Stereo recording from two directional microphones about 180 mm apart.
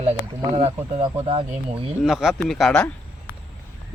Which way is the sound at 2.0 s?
Centre (ahead or behind).